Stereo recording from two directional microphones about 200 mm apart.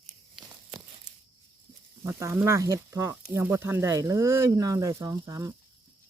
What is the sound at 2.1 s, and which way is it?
Speech, 15° right (ahead or behind).